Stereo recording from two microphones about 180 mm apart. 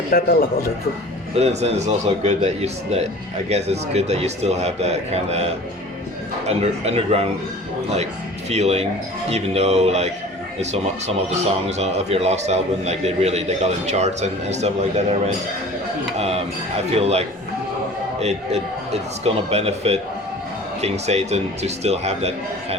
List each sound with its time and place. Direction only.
0.1 s speech: 55° left (ahead or behind)
1.4 s a man's voice: 35° right (ahead or behind)
6.5 s a man's voice: 35° right (ahead or behind)
8.4 s a man's voice: 35° right (ahead or behind)
19.2 s a man's voice: 35° right (ahead or behind)